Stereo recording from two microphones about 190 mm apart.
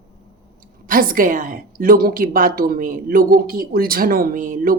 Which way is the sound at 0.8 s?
45° right (ahead or behind).